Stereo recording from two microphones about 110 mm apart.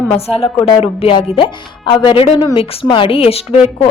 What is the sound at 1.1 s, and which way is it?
A woman's voice, 50° left (ahead or behind).